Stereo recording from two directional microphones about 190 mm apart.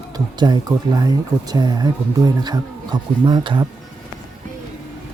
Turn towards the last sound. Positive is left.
turn(degrees=-25)  # may be behind; listen again after turning